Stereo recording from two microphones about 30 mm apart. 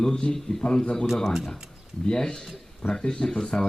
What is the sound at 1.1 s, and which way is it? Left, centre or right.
Speech, centre.